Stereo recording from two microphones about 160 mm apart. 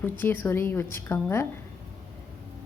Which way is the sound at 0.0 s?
15° left (ahead or behind).